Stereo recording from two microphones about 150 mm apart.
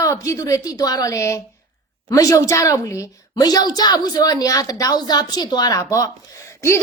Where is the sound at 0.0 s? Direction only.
20° left (ahead or behind).